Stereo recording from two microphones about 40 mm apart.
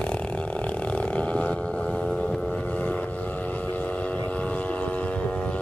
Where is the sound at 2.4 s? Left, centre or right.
Left.